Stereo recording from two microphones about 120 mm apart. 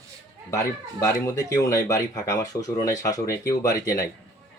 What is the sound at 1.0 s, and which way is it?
Speech, 25° left (ahead or behind).